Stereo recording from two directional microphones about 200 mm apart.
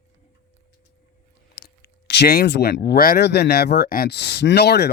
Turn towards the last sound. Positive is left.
turn(degrees=55)  # may be behind; listen again after turning